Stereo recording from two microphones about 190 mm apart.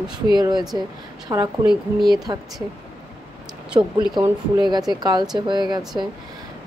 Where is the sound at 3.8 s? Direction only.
20° right (ahead or behind).